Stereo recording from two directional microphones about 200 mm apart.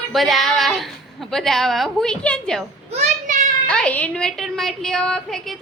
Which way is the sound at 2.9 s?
35° right (ahead or behind).